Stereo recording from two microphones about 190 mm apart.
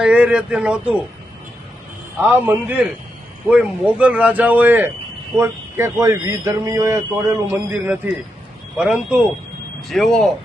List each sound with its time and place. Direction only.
0.0 s speech: 5° right (ahead or behind)
2.1 s a man's voice: 10° right (ahead or behind)